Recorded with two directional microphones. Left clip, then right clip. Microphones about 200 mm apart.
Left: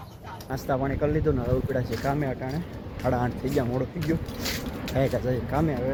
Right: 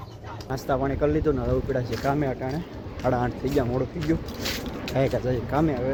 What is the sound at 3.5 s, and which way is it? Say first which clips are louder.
Speech: right 3 dB; 5° right (ahead or behind).